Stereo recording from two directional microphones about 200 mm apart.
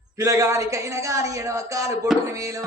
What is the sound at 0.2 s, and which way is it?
Speech, 15° right (ahead or behind).